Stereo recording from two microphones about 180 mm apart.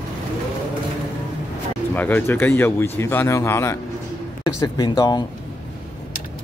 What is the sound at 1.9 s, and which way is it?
Speech, 10° left (ahead or behind).